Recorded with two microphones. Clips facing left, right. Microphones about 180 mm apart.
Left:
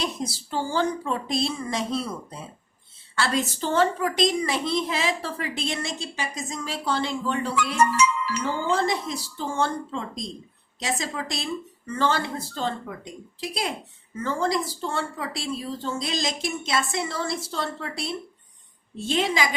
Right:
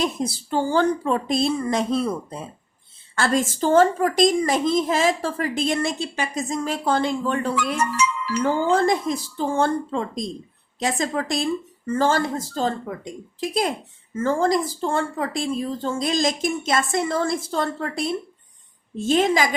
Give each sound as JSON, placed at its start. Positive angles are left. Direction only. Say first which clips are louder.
{"t": 0.0, "sound": "a child's voice", "louder": "right 5 dB", "side_deg": -55}